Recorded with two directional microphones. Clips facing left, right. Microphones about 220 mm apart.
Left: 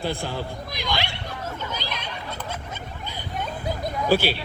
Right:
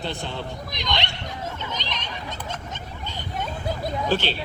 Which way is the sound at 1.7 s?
10° left (ahead or behind).